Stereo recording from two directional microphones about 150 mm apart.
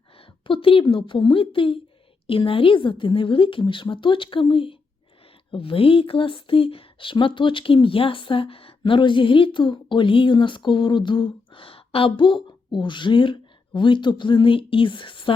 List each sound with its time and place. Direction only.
0.4 s speech: 35° left (ahead or behind)